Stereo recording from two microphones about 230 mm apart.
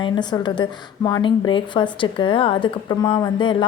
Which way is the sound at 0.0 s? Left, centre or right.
Centre.